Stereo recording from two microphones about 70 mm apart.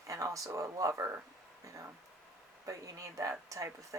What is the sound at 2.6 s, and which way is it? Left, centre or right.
Speech, right.